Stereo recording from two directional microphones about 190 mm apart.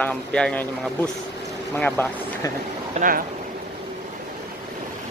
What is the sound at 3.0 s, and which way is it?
Speech, 50° right (ahead or behind).